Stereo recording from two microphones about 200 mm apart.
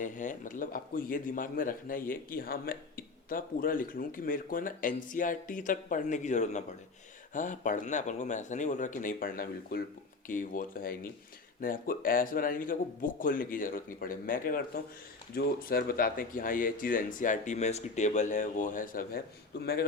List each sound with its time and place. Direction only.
0.0 s a man's voice: 40° left (ahead or behind)